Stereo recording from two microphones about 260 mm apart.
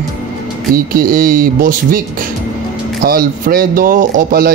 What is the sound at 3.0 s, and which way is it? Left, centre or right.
Speech, right.